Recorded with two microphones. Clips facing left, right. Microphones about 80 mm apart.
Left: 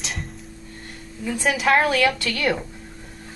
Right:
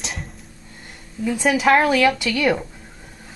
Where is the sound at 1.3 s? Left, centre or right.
Centre.